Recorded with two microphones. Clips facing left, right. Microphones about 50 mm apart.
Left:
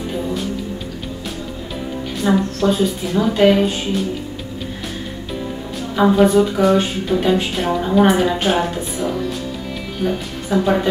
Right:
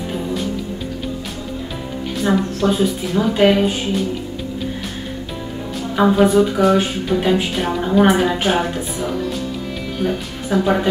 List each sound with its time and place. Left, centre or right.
2.2 s speech: right
2.6 s speech: centre
5.9 s speech: centre